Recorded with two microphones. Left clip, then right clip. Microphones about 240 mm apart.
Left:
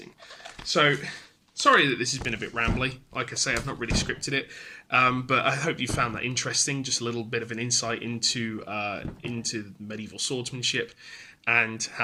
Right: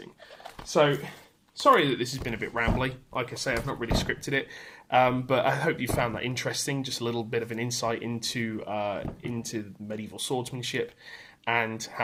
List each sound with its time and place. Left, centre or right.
1.7 s speech: centre